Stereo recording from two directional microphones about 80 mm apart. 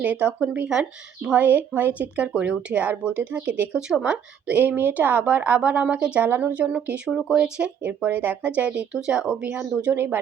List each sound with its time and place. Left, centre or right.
0.0 s a woman's voice: centre
7.9 s speech: right
9.8 s a woman's voice: right